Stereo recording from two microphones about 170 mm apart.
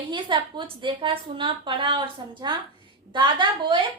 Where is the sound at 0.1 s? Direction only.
25° right (ahead or behind).